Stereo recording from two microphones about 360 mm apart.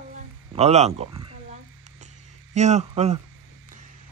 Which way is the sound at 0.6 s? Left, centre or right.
Centre.